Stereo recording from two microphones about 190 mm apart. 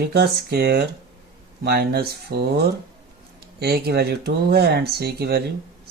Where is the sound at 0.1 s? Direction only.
60° right (ahead or behind).